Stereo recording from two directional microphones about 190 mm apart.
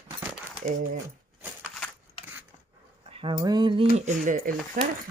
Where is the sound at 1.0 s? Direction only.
10° right (ahead or behind).